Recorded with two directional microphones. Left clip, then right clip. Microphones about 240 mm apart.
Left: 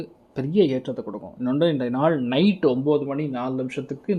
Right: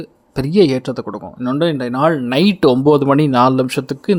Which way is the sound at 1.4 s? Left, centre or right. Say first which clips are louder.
Right 4 dB; centre.